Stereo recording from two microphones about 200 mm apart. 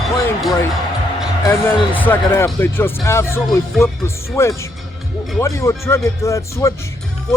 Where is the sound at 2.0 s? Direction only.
10° left (ahead or behind).